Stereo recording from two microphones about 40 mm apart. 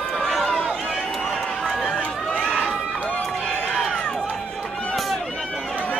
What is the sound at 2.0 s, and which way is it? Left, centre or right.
Run, left.